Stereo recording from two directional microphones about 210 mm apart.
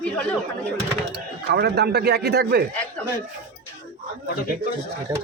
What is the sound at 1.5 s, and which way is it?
A man's voice, 50° right (ahead or behind).